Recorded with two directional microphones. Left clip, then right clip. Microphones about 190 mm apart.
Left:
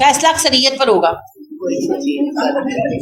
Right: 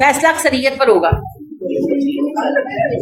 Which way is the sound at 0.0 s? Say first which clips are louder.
Even; 40° left (ahead or behind).